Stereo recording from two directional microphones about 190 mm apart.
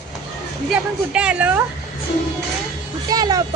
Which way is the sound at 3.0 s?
20° right (ahead or behind).